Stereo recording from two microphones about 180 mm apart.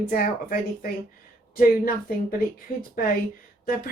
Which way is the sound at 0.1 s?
55° left (ahead or behind).